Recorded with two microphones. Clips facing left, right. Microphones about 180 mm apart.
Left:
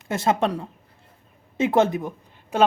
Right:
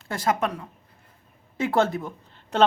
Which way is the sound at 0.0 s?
25° left (ahead or behind).